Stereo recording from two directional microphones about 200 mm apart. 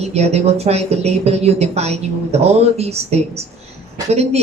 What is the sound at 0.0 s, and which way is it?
Speech, 30° right (ahead or behind).